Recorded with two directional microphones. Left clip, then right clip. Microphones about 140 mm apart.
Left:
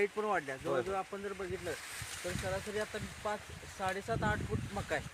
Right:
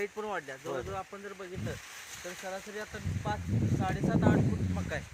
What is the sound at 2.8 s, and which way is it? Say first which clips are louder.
Speech: left 2 dB; 50° left (ahead or behind).